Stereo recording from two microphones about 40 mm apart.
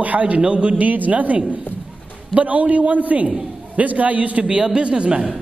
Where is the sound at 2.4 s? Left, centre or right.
Right.